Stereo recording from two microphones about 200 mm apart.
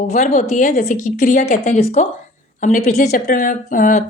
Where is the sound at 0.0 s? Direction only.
35° left (ahead or behind).